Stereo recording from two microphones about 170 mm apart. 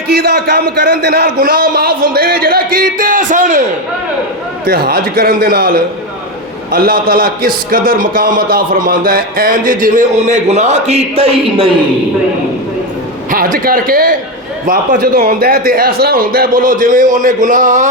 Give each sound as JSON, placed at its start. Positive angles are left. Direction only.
{"t": 0.1, "sound": "a man's voice", "side_deg": -70}
{"t": 4.6, "sound": "a man's voice", "side_deg": -65}
{"t": 13.3, "sound": "a man's voice", "side_deg": -55}